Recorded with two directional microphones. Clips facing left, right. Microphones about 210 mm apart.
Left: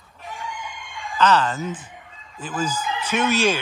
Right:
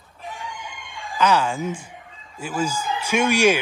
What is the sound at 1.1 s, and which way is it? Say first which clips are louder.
A man's voice: left 1 dB; 10° right (ahead or behind).